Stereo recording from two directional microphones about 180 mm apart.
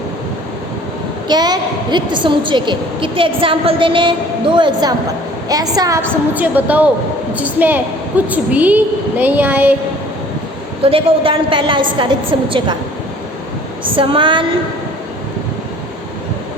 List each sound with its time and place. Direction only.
1.3 s a woman's voice: 25° right (ahead or behind)
6.3 s a woman's voice: 10° right (ahead or behind)
10.8 s a woman's voice: 30° right (ahead or behind)
13.9 s a woman's voice: 30° right (ahead or behind)